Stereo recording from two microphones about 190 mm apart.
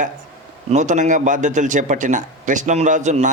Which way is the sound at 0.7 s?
40° right (ahead or behind).